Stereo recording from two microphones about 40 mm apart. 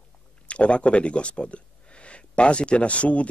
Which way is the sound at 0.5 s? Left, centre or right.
Left.